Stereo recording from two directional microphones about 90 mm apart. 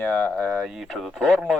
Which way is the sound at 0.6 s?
Centre (ahead or behind).